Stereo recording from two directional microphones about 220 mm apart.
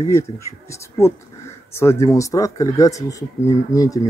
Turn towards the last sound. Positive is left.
turn(degrees=15)  # may be behind; listen again after turning